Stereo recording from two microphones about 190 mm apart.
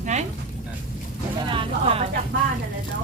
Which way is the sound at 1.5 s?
30° right (ahead or behind).